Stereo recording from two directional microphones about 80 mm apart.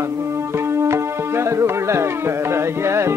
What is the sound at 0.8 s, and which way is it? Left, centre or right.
Music, right.